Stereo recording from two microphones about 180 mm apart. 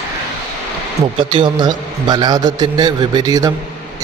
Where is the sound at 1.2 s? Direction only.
30° right (ahead or behind).